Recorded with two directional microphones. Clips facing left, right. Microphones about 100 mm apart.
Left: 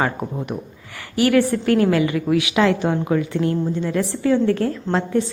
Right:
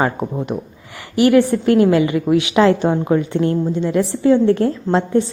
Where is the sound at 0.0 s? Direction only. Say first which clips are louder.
Right 3 dB; 25° right (ahead or behind).